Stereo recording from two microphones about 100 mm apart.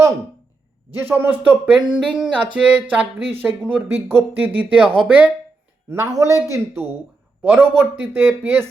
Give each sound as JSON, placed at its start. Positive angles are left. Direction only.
{"t": 0.9, "sound": "speech", "side_deg": -20}
{"t": 5.9, "sound": "a man's voice", "side_deg": -30}
{"t": 7.4, "sound": "speech", "side_deg": -20}